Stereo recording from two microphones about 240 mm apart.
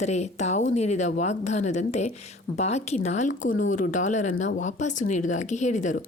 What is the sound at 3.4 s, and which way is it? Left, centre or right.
Speech, left.